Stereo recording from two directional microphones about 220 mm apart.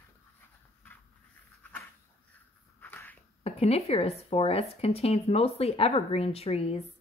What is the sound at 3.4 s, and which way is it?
Speech, 25° left (ahead or behind).